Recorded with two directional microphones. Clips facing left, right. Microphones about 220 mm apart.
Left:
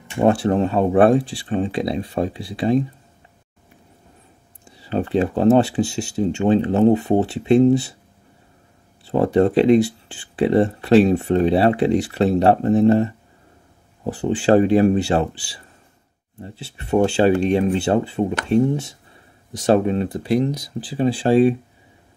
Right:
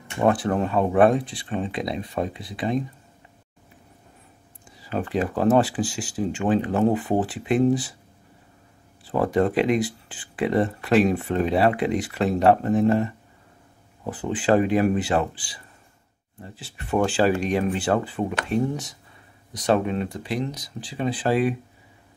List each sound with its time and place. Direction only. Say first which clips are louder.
0.2 s speech: left 4 dB; 25° left (ahead or behind)
4.7 s speech: left 5 dB; 30° left (ahead or behind)
9.0 s speech: left 5 dB; 25° left (ahead or behind)